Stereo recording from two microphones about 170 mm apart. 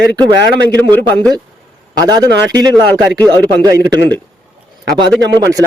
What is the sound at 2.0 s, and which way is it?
A man's voice, 25° right (ahead or behind).